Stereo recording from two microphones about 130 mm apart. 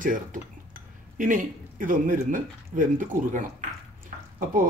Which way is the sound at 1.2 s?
90° right.